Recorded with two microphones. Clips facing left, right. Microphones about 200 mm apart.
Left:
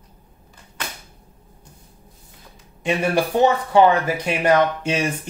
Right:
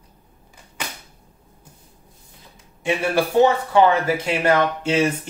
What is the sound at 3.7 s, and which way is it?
Speech, 20° left (ahead or behind).